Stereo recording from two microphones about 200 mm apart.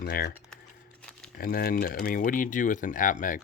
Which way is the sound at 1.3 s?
50° left (ahead or behind).